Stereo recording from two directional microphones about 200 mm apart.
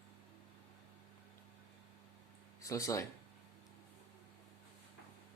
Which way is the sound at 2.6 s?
15° left (ahead or behind).